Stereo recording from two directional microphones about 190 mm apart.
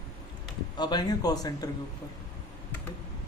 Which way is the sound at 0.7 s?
20° left (ahead or behind).